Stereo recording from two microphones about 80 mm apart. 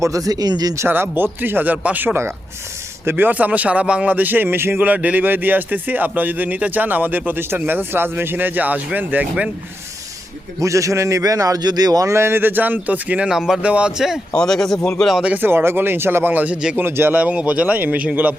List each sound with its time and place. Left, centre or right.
0.0 s speech: right
0.9 s speech: right
3.1 s speech: right
10.6 s speech: right
12.1 s speech: right
13.3 s speech: centre
14.3 s a man's voice: centre
15.2 s speech: right